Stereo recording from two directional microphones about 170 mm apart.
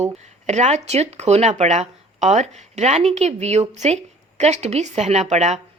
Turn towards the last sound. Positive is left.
turn(degrees=-40)  # may be behind; listen again after turning